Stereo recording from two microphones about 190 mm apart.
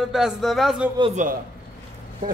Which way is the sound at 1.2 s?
40° right (ahead or behind).